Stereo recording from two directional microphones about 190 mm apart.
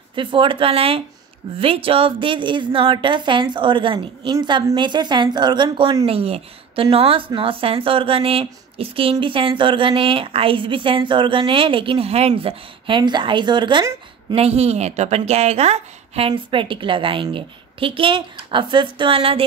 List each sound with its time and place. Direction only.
0.1 s a woman's voice: 25° right (ahead or behind)